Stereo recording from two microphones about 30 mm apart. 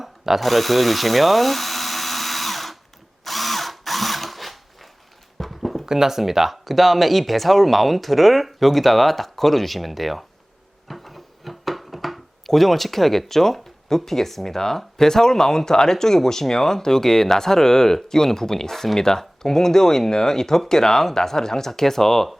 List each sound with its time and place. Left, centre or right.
0.3 s drill: centre
5.4 s clip-clop: centre
5.8 s speech: centre
6.7 s speech: centre
10.8 s a sound: centre
12.5 s speech: centre